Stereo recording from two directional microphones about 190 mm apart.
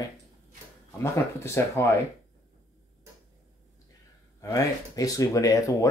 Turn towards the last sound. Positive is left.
turn(degrees=15)  # may be behind; listen again after turning